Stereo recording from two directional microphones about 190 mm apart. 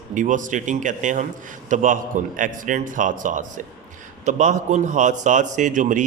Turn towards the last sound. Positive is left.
turn(degrees=-45)  # may be behind; listen again after turning